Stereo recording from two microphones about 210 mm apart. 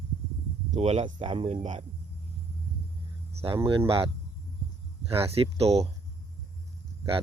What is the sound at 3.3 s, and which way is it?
Speech, 25° right (ahead or behind).